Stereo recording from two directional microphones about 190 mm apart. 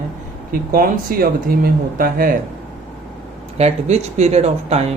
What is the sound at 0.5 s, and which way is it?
Speech, 50° right (ahead or behind).